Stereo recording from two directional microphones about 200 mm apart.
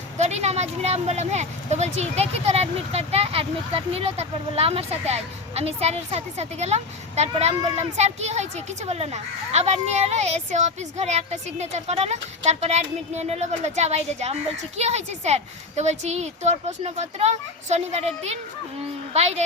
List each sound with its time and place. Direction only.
0.2 s a woman's voice: 35° right (ahead or behind)